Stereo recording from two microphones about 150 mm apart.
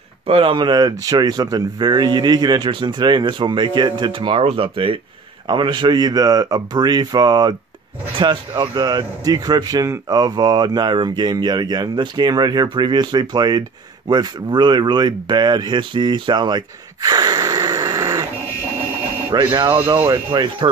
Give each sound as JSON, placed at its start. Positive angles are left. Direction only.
{"t": 0.3, "sound": "speech", "side_deg": -35}
{"t": 19.3, "sound": "speech", "side_deg": -30}
{"t": 20.1, "sound": "speech", "side_deg": -25}